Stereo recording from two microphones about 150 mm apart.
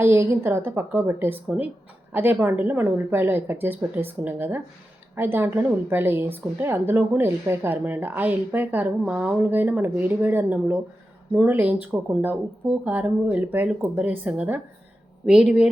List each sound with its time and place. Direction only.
0.0 s a woman's voice: 15° right (ahead or behind)